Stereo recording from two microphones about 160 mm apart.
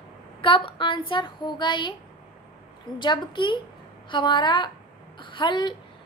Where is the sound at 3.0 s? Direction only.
30° left (ahead or behind).